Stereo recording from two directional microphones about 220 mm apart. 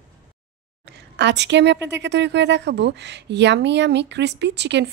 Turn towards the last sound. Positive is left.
turn(degrees=-50)  # may be behind; listen again after turning